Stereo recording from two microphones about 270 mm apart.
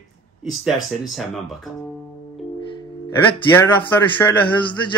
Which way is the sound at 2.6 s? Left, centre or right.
Centre.